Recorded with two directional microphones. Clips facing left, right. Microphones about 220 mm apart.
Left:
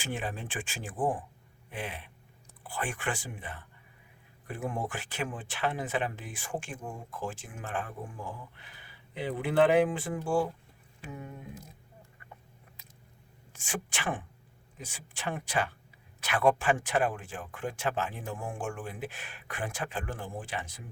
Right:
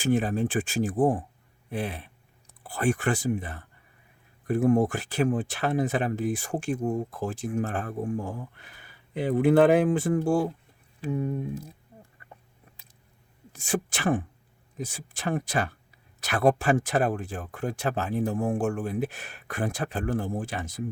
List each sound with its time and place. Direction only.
0.0 s speech: 40° right (ahead or behind)
13.5 s speech: 40° right (ahead or behind)